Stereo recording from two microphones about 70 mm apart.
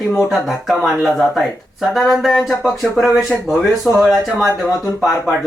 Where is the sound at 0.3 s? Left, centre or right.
Centre.